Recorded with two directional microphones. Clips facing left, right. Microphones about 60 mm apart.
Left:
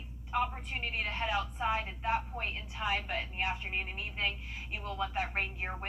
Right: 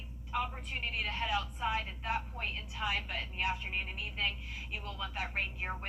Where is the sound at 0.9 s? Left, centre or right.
Left.